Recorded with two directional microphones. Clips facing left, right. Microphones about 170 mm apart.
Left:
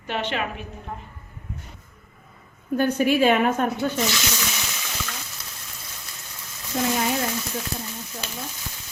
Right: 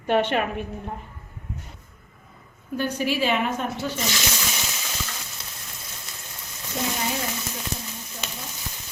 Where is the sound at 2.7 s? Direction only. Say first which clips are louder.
Left 5 dB; 50° left (ahead or behind).